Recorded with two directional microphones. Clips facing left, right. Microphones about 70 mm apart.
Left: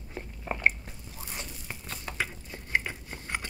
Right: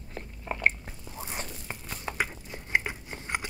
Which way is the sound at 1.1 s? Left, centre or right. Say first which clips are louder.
Right 4 dB; right.